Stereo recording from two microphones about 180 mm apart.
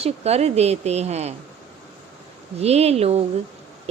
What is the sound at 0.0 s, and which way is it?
A woman's voice, 35° right (ahead or behind).